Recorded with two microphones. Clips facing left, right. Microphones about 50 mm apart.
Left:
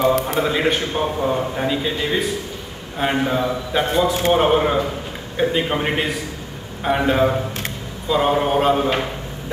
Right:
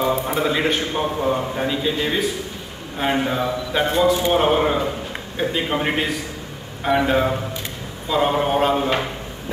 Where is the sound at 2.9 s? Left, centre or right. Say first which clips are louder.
Left 1 dB; centre.